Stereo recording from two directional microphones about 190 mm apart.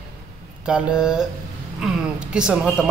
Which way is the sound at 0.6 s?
5° right (ahead or behind).